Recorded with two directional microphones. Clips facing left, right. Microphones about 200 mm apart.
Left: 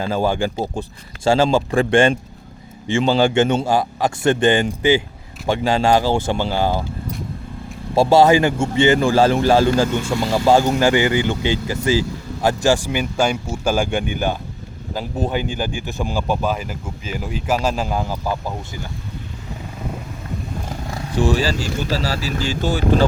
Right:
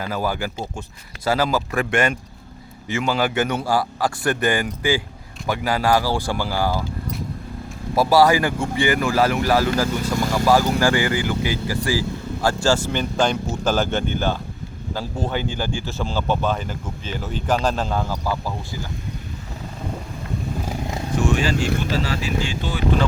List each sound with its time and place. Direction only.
0.0 s a man's voice: 25° left (ahead or behind)
7.9 s a man's voice: 25° left (ahead or behind)
21.2 s speech: 35° left (ahead or behind)